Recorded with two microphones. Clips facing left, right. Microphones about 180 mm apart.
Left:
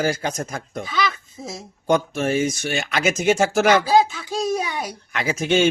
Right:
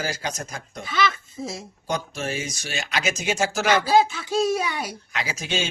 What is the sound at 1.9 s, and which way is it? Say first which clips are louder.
Speech: left 8 dB; 55° left (ahead or behind).